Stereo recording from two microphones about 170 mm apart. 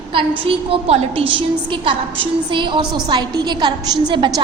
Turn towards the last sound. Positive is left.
turn(degrees=-25)  # may be behind; listen again after turning